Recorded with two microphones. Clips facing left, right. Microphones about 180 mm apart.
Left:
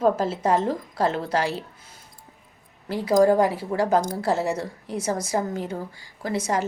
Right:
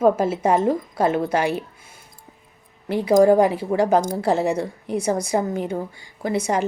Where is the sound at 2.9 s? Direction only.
20° right (ahead or behind).